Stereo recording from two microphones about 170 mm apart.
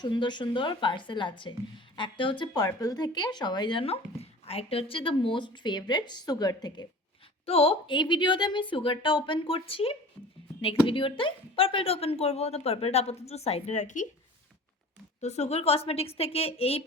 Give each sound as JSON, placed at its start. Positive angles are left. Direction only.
{"t": 0.0, "sound": "a woman's voice", "side_deg": 25}
{"t": 7.4, "sound": "a woman's voice", "side_deg": 35}
{"t": 10.2, "sound": "speech", "side_deg": 15}
{"t": 10.8, "sound": "speech", "side_deg": 30}
{"t": 15.2, "sound": "speech", "side_deg": 40}